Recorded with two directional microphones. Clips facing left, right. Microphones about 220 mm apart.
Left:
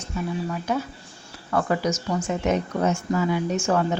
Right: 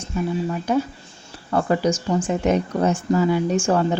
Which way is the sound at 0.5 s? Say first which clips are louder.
Right 5 dB; 30° right (ahead or behind).